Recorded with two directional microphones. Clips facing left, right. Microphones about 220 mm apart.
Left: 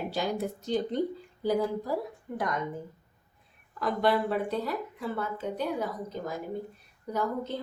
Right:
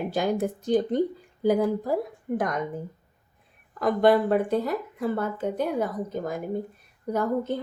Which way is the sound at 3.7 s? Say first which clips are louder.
Right 6 dB; 50° right (ahead or behind).